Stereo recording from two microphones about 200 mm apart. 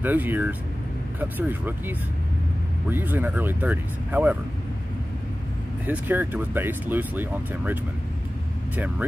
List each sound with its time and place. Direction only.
0.0 s speech: 10° right (ahead or behind)
5.9 s speech: 10° right (ahead or behind)